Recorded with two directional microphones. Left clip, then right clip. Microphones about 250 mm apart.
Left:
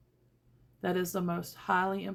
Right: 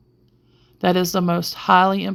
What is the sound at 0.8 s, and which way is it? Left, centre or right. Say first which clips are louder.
Speech: right 13 dB; right.